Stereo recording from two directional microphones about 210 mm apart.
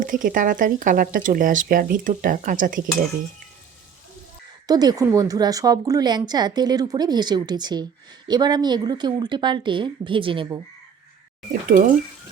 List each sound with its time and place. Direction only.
0.0 s speech: 40° right (ahead or behind)
4.6 s a woman's voice: 20° right (ahead or behind)
11.7 s speech: 50° right (ahead or behind)